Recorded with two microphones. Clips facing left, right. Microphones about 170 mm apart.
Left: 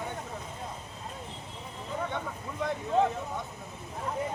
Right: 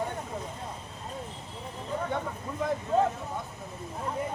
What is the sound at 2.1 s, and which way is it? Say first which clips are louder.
Vehicle: right 2 dB; 5° right (ahead or behind).